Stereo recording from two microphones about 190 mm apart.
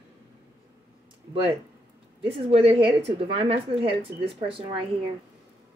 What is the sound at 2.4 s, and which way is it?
Speech, 30° right (ahead or behind).